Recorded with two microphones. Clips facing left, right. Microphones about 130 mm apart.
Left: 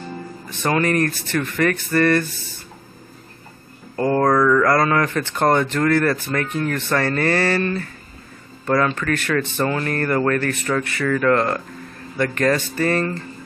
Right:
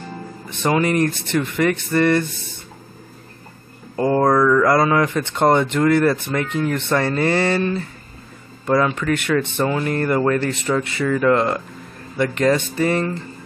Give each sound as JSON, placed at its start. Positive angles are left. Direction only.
{"t": 0.5, "sound": "speech", "side_deg": -15}
{"t": 3.9, "sound": "speech", "side_deg": -15}
{"t": 10.4, "sound": "speech", "side_deg": -25}